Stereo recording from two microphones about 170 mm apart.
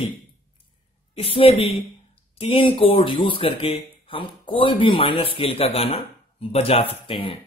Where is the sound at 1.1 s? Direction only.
35° left (ahead or behind).